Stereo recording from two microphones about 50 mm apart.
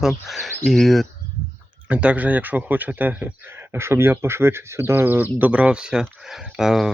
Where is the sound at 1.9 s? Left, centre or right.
Right.